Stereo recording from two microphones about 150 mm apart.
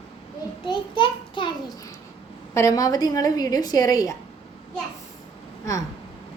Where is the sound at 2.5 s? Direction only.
20° left (ahead or behind).